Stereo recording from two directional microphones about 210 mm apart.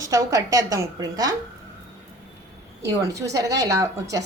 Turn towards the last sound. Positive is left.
turn(degrees=-15)  # may be behind; listen again after turning